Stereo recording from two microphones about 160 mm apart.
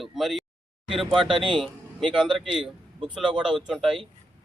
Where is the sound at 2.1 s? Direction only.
Centre (ahead or behind).